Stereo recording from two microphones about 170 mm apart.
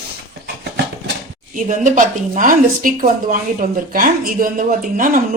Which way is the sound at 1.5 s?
50° right (ahead or behind).